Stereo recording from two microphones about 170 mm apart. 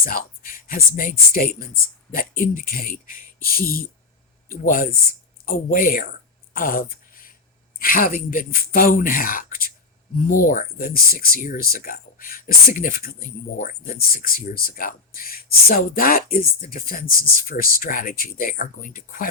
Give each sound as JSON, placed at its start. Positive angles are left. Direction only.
{"t": 0.0, "sound": "speech", "side_deg": 55}
{"t": 6.5, "sound": "a sound", "side_deg": 55}
{"t": 7.8, "sound": "speech", "side_deg": 55}